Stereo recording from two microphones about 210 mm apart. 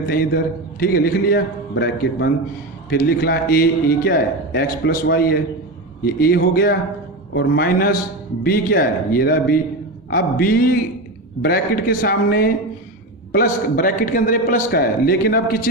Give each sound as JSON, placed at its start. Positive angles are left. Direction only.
{"t": 0.0, "sound": "a man's voice", "side_deg": 50}